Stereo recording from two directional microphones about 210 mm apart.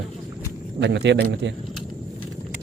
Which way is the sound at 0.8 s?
55° right (ahead or behind).